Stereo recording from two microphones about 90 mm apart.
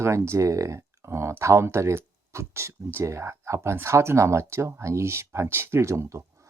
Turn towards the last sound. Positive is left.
turn(degrees=-30)  # may be behind; listen again after turning